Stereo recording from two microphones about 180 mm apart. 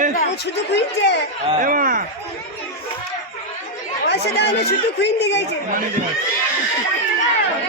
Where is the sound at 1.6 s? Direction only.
50° right (ahead or behind).